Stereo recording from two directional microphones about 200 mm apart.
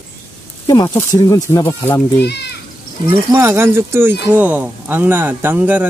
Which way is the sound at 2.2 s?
55° left (ahead or behind).